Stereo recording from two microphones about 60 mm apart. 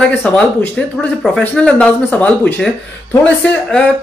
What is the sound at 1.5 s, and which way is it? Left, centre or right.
Speech, centre.